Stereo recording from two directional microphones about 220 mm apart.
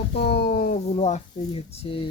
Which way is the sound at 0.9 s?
30° left (ahead or behind).